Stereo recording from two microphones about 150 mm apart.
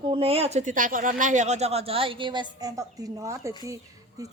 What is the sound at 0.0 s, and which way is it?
Speech, 35° right (ahead or behind).